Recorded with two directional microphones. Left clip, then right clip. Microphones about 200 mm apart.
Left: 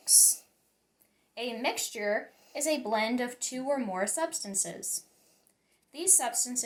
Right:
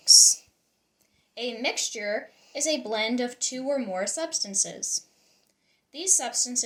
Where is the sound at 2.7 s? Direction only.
45° right (ahead or behind).